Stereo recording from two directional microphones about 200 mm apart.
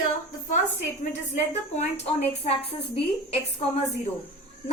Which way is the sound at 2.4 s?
30° left (ahead or behind).